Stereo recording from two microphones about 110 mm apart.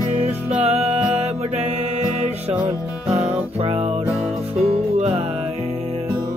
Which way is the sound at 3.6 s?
65° right (ahead or behind).